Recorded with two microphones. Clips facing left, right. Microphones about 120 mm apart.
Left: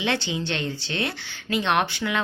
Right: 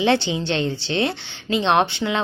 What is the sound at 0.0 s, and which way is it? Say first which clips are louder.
A woman's voice: right 7 dB; 30° right (ahead or behind).